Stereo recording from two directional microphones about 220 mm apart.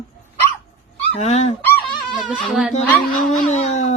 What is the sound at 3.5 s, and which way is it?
Speech, 30° left (ahead or behind).